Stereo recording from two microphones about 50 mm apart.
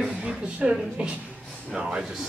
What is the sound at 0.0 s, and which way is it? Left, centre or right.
A man's voice, right.